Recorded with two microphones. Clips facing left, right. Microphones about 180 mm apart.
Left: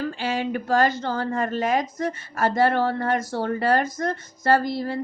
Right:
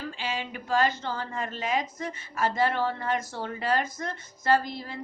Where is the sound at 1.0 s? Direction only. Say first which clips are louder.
Left 8 dB; 45° left (ahead or behind).